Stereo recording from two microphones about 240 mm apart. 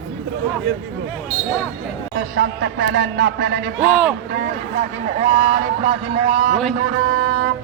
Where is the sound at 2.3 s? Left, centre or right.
Right.